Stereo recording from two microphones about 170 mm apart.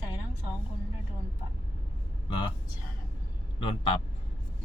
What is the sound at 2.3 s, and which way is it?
Speech, 30° left (ahead or behind).